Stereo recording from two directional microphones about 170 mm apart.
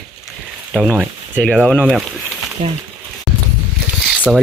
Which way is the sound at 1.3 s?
5° left (ahead or behind).